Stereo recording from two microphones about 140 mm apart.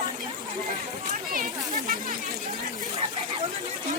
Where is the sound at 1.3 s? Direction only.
80° right.